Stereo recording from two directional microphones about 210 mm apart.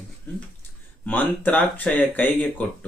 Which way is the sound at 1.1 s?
10° left (ahead or behind).